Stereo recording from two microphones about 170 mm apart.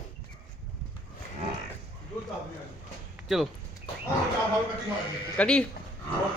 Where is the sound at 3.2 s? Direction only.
Centre (ahead or behind).